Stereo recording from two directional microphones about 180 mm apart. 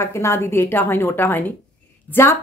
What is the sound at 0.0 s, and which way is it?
A woman's voice, 15° left (ahead or behind).